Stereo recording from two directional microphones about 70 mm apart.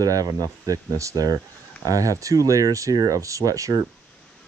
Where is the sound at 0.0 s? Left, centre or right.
Right.